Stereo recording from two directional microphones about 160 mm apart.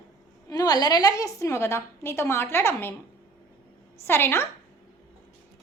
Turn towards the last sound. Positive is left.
turn(degrees=15)  # may be behind; listen again after turning